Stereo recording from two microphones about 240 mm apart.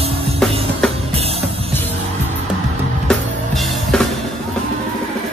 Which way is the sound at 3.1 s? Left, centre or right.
Centre.